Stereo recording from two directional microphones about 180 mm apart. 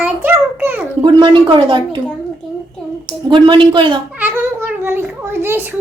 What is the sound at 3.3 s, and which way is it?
Speech, 25° right (ahead or behind).